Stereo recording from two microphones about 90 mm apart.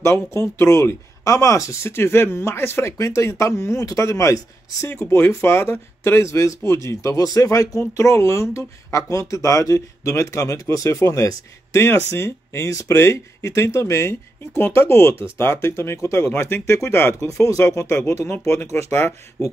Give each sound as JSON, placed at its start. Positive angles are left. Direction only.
{"t": 0.0, "sound": "speech", "side_deg": 30}